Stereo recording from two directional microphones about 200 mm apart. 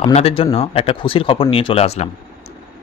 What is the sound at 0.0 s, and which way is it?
A man's voice, 30° left (ahead or behind).